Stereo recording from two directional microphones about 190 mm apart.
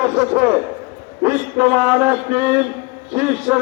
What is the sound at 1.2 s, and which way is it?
A man's voice, 10° right (ahead or behind).